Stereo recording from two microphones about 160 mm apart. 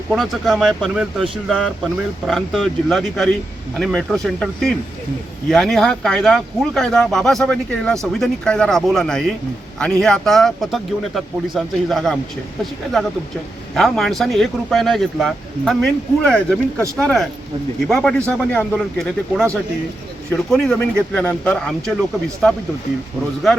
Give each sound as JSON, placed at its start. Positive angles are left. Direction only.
{"t": 0.1, "sound": "speech", "side_deg": 0}
{"t": 13.7, "sound": "speech", "side_deg": 0}